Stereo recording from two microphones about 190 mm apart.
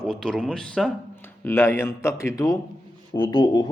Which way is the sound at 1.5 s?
15° left (ahead or behind).